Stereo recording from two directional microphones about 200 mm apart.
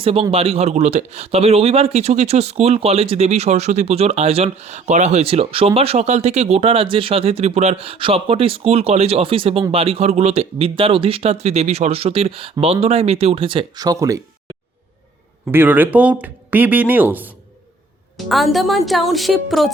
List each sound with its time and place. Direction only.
0.0 s a man's voice: 25° right (ahead or behind)
15.5 s speech: 10° right (ahead or behind)